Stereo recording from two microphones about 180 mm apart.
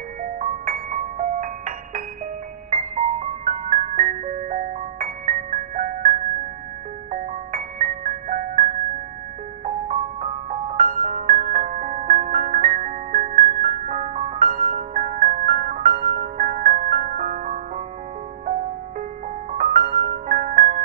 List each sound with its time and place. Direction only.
0.2 s music: 45° right (ahead or behind)
3.4 s music: 45° right (ahead or behind)
9.8 s music: 40° right (ahead or behind)
16.2 s music: 50° right (ahead or behind)
20.2 s music: 45° right (ahead or behind)